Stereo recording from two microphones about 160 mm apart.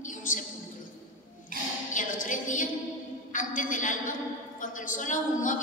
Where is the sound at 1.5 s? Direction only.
65° right (ahead or behind).